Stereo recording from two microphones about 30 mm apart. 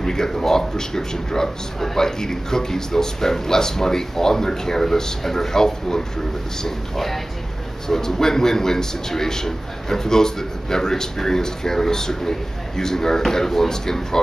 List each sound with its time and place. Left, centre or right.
0.0 s a man's voice: centre
7.9 s a man's voice: centre